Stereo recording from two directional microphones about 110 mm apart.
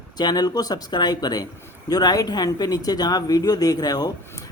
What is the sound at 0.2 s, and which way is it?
Speech, 40° left (ahead or behind).